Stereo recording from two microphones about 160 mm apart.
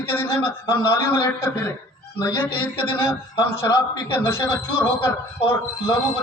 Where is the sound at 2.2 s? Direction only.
30° left (ahead or behind).